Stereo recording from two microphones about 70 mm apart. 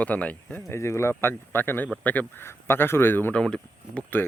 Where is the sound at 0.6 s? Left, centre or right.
Left.